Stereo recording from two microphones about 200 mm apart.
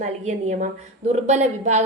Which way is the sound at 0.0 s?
35° right (ahead or behind).